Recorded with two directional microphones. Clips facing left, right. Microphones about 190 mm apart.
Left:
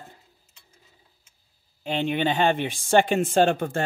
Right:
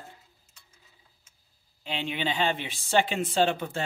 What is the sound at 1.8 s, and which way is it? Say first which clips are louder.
Speech: left 7 dB; 50° left (ahead or behind).